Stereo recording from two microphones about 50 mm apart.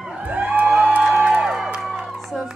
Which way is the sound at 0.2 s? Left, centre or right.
Right.